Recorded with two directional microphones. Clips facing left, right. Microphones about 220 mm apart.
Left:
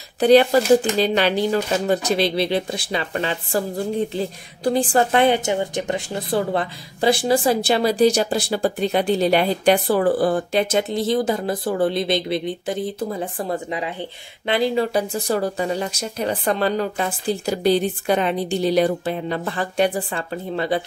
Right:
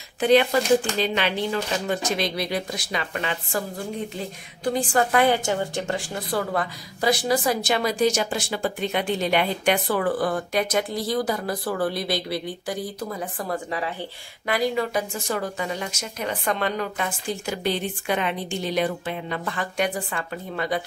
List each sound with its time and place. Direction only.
0.2 s speech: 35° left (ahead or behind)